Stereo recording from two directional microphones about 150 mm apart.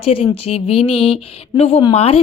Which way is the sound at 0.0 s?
40° left (ahead or behind).